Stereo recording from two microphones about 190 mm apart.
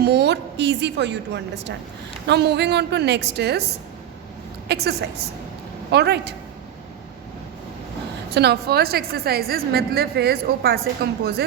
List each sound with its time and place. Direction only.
0.0 s a woman's voice: 60° right (ahead or behind)
4.7 s a woman's voice: 60° right (ahead or behind)
8.4 s a woman's voice: 60° right (ahead or behind)